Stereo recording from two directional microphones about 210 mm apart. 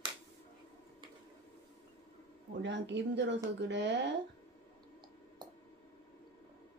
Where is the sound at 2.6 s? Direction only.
55° right (ahead or behind).